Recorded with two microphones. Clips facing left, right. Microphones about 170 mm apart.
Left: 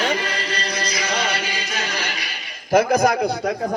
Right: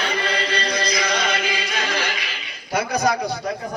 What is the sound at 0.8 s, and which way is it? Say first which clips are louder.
Music: left 1 dB; 35° left (ahead or behind).